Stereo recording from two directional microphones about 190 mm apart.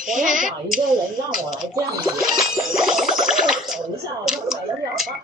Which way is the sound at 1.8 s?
20° right (ahead or behind).